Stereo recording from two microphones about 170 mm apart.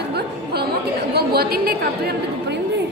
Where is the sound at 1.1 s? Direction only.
65° right (ahead or behind).